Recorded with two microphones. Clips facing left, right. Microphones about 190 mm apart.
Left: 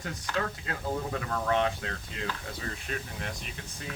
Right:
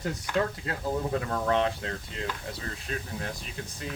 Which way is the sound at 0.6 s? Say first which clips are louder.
Right 3 dB; 30° right (ahead or behind).